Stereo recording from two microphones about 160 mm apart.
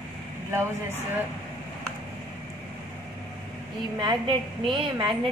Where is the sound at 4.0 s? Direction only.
30° right (ahead or behind).